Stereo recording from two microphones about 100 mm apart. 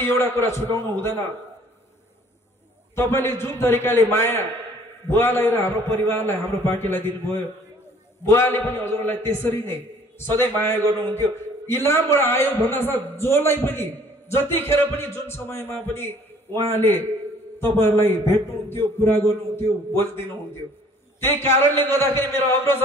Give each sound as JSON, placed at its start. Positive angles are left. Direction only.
{"t": 0.0, "sound": "a man's voice", "side_deg": 20}
{"t": 3.0, "sound": "a man's voice", "side_deg": 25}
{"t": 17.6, "sound": "a man's voice", "side_deg": 25}